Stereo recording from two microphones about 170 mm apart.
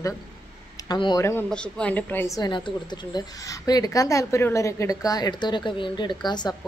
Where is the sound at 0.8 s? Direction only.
25° left (ahead or behind).